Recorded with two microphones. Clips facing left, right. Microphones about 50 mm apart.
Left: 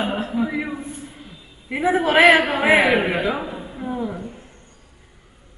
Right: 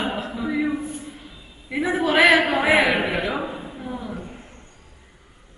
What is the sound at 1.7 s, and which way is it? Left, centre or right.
A woman's voice, centre.